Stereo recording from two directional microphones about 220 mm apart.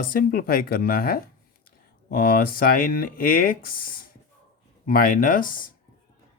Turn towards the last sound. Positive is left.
turn(degrees=40)  # may be behind; listen again after turning